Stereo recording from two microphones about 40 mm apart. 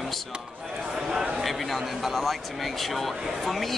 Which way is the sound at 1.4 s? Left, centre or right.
Centre.